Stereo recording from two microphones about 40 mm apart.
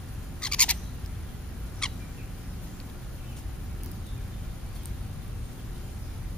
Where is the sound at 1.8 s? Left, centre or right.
Centre.